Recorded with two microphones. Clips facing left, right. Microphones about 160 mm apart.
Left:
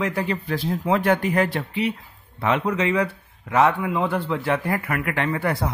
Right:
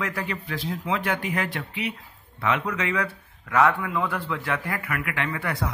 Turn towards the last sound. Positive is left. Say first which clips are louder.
# left 5 dB
turn(degrees=35)  # may be behind; listen again after turning